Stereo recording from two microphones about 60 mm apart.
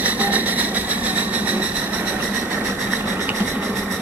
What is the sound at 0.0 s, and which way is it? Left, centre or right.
Vehicle, right.